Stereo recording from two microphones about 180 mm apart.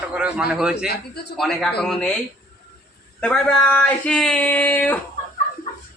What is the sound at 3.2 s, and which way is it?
Speech, 5° left (ahead or behind).